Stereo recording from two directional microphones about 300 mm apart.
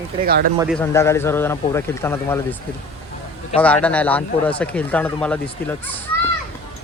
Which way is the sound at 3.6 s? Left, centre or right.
Centre.